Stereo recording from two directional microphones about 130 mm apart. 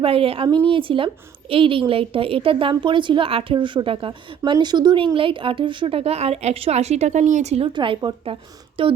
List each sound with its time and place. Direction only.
0.0 s a woman's voice: 45° right (ahead or behind)
7.7 s a woman's voice: 40° right (ahead or behind)